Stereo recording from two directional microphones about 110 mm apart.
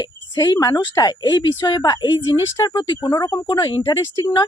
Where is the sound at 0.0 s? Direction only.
35° left (ahead or behind).